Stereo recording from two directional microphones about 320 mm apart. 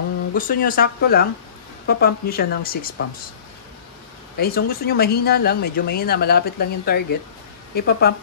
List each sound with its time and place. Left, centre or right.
0.3 s speech: left
4.4 s speech: left